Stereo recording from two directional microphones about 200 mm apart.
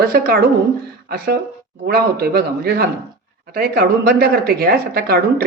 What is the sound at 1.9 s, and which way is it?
Speech, 50° right (ahead or behind).